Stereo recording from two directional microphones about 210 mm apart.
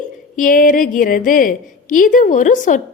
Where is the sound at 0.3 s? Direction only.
40° left (ahead or behind).